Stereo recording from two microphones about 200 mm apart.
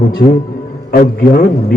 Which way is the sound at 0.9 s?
50° left (ahead or behind).